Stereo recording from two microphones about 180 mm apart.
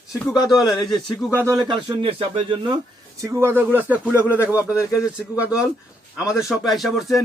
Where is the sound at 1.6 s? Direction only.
25° right (ahead or behind).